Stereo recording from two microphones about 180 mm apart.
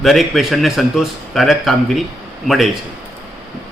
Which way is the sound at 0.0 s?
Centre (ahead or behind).